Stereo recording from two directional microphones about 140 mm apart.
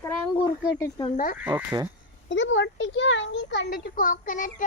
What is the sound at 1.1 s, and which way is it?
Speech, 85° left.